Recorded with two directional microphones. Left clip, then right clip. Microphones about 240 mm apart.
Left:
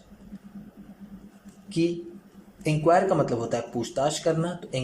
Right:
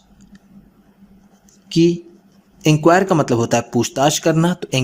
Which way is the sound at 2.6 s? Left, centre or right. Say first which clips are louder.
Right 8 dB; right.